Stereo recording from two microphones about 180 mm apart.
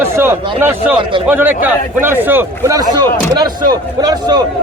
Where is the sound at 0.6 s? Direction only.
10° right (ahead or behind).